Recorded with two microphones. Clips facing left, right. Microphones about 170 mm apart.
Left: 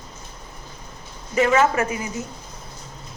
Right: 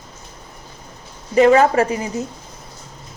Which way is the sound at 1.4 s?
35° right (ahead or behind).